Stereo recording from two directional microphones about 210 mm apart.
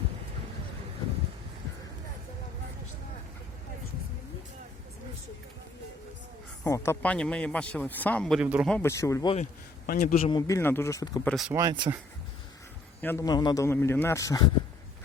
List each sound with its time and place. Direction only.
6.7 s speech: 15° left (ahead or behind)
9.8 s a man's voice: 45° left (ahead or behind)
10.2 s speech: 20° left (ahead or behind)
11.3 s speech: centre (ahead or behind)
11.5 s speech: 20° right (ahead or behind)
13.0 s speech: 10° left (ahead or behind)